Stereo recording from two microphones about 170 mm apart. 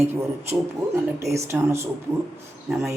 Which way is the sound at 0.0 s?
15° right (ahead or behind).